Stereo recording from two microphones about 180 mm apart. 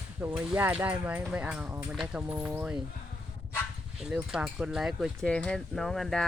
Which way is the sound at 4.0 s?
5° right (ahead or behind).